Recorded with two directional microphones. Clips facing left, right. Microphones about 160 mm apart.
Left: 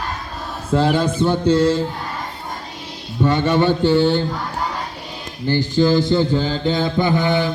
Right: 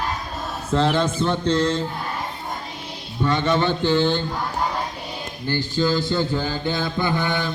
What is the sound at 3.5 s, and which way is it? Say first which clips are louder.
Speech: left 4 dB; 15° left (ahead or behind).